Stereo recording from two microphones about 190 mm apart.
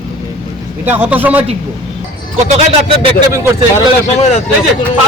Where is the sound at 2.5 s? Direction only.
30° right (ahead or behind).